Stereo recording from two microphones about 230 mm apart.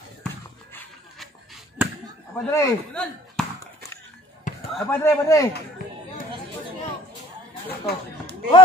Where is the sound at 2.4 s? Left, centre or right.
Centre.